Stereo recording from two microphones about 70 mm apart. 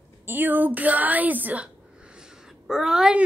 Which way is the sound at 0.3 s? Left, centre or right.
Right.